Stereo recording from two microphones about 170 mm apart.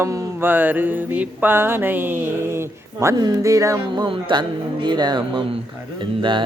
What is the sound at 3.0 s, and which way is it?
Speech, 20° right (ahead or behind).